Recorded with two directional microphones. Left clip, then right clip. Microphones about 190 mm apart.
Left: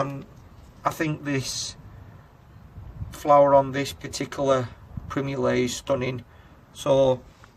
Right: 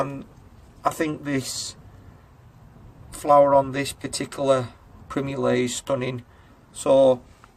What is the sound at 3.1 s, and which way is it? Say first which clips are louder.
Speech: right 1 dB; 40° right (ahead or behind).